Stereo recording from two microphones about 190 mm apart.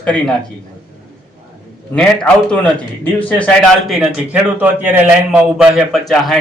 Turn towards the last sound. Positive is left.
turn(degrees=0)  # may be behind; listen again after turning